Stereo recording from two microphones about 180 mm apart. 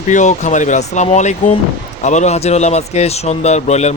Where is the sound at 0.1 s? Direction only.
40° left (ahead or behind).